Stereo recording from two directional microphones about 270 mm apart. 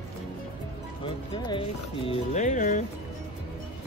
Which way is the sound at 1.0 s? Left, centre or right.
Centre.